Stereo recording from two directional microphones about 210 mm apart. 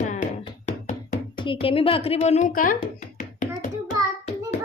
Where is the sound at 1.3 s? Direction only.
25° left (ahead or behind); by 2.8 s 40° left (ahead or behind).